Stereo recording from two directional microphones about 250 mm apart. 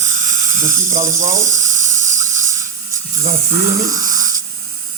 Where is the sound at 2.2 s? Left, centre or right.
Centre.